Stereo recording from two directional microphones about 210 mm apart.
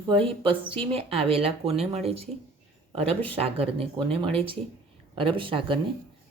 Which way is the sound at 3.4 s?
25° right (ahead or behind).